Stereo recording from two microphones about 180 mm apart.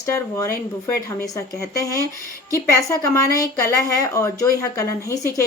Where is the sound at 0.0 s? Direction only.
15° left (ahead or behind).